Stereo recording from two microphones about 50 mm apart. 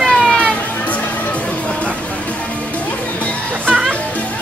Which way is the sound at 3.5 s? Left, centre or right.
Right.